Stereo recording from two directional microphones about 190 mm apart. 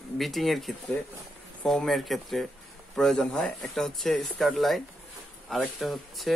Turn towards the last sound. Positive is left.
turn(degrees=0)  # may be behind; listen again after turning